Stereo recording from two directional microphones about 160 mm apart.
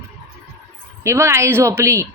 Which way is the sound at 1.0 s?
15° right (ahead or behind).